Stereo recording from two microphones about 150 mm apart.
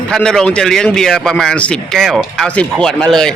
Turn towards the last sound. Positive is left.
turn(degrees=5)  # may be behind; listen again after turning